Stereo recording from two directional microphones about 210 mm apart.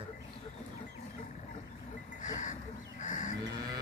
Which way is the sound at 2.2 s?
35° left (ahead or behind).